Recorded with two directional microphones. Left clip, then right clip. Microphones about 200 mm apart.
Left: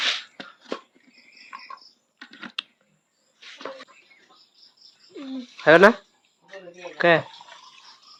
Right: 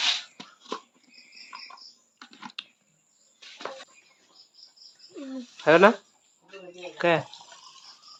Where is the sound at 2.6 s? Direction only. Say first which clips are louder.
Left 8 dB; 30° left (ahead or behind).